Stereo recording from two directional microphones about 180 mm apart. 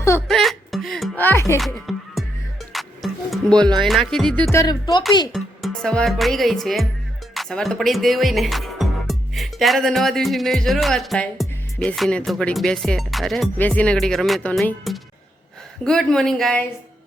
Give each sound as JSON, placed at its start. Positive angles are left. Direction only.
{"t": 0.3, "sound": "speech", "side_deg": 0}
{"t": 1.2, "sound": "speech", "side_deg": 15}
{"t": 1.5, "sound": "speech", "side_deg": 0}
{"t": 2.7, "sound": "music", "side_deg": 0}
{"t": 3.8, "sound": "speech", "side_deg": 0}
{"t": 4.5, "sound": "speech", "side_deg": 20}
{"t": 5.3, "sound": "speech", "side_deg": 0}